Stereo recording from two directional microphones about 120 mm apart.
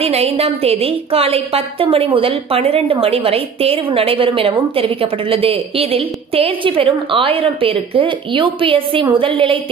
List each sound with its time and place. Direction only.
0.0 s a woman's voice: 60° right (ahead or behind)